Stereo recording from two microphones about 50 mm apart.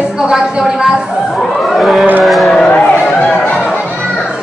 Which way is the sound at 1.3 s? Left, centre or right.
Centre.